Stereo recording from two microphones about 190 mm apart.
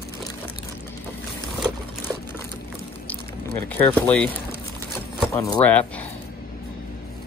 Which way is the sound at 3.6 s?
10° left (ahead or behind).